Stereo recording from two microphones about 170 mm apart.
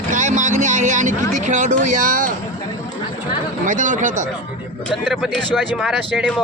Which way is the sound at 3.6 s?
50° right (ahead or behind).